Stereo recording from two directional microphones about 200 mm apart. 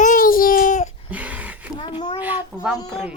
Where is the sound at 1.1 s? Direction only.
5° right (ahead or behind).